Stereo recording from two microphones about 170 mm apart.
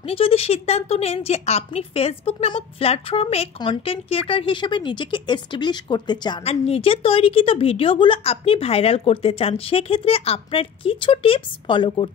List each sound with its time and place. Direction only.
0.0 s a woman's voice: 35° left (ahead or behind)